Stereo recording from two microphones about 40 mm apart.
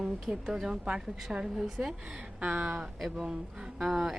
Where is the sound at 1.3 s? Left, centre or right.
Right.